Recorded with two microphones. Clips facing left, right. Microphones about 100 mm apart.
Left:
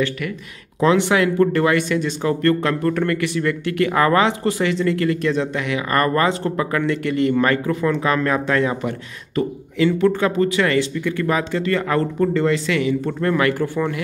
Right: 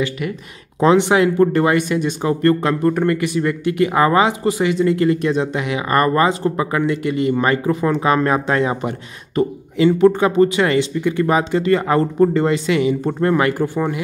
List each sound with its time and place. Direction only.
0.7 s speech: 25° right (ahead or behind)